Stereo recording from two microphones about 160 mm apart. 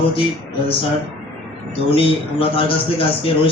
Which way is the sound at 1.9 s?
35° left (ahead or behind).